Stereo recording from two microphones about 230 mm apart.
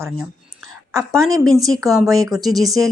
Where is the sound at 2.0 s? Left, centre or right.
Centre.